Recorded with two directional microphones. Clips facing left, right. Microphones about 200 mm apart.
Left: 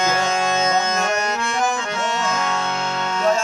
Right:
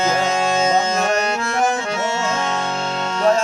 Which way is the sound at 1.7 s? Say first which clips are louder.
Right 2 dB; 25° right (ahead or behind).